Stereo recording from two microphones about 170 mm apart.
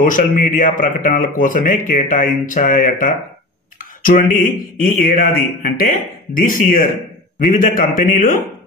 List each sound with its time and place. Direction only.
0.0 s speech: 55° left (ahead or behind)